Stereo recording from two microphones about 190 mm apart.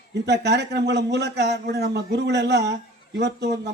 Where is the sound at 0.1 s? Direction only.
60° right (ahead or behind).